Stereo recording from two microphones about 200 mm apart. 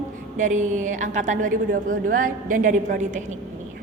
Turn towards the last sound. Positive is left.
turn(degrees=-40)  # may be behind; listen again after turning